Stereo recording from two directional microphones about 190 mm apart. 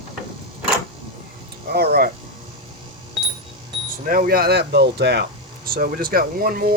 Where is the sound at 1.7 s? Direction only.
55° right (ahead or behind).